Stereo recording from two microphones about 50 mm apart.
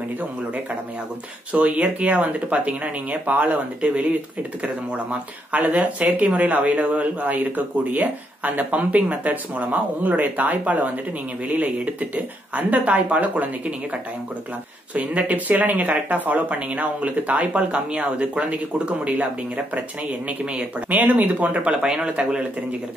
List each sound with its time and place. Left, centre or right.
1.5 s speech: right
3.8 s speech: right
15.0 s speech: right